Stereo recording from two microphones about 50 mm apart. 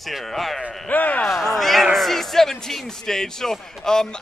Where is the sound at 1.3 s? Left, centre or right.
Centre.